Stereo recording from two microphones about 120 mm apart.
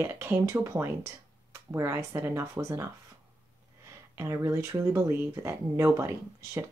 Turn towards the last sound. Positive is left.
turn(degrees=-20)  # may be behind; listen again after turning